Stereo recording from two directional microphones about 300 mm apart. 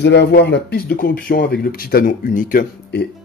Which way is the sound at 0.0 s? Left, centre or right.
Left.